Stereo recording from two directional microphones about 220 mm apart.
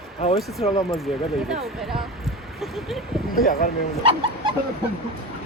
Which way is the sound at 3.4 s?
45° left (ahead or behind).